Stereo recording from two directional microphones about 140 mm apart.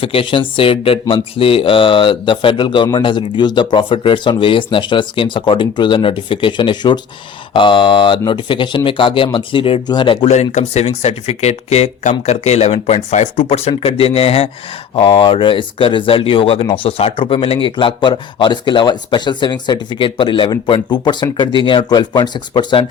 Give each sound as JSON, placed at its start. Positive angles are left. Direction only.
{"t": 0.0, "sound": "speech", "side_deg": 40}
{"t": 10.2, "sound": "speech", "side_deg": 50}